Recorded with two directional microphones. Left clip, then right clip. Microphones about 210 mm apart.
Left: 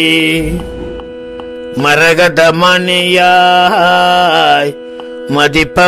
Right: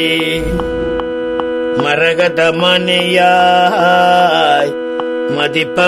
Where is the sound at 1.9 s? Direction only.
35° left (ahead or behind).